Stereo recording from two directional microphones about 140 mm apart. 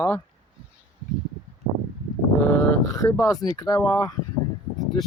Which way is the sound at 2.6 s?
20° left (ahead or behind).